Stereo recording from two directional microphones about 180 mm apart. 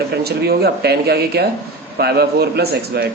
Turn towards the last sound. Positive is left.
turn(degrees=-60)  # may be behind; listen again after turning